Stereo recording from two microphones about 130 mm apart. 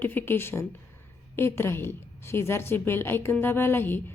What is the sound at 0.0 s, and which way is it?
A woman's voice, 15° left (ahead or behind).